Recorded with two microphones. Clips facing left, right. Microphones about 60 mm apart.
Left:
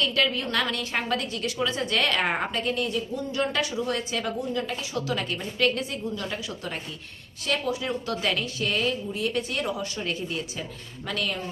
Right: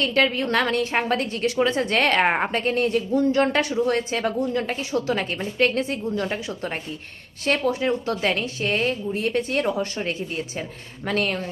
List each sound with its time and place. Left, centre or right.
0.0 s a woman's voice: right
7.4 s a woman's voice: right